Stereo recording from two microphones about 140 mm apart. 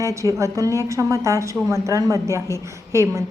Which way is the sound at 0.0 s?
20° right (ahead or behind).